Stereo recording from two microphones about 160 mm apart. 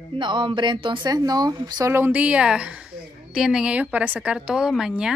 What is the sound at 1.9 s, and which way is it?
A woman's voice, 10° right (ahead or behind).